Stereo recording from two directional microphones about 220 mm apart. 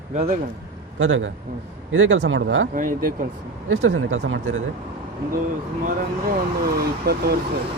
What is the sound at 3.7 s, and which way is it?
Speech, 65° right (ahead or behind).